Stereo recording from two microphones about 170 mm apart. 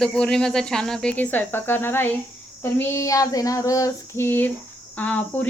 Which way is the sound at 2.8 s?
15° left (ahead or behind).